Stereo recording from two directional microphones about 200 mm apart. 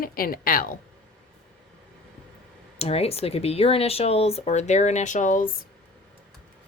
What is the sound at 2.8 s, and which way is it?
Speech, 30° left (ahead or behind).